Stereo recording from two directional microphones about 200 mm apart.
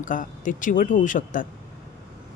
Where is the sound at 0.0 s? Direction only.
40° left (ahead or behind).